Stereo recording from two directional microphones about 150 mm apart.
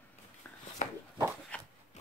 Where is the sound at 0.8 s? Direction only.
55° left (ahead or behind).